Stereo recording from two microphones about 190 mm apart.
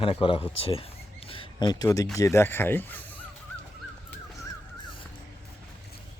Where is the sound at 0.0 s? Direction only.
30° left (ahead or behind).